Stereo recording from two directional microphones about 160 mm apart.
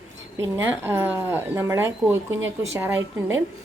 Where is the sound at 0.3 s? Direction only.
15° right (ahead or behind).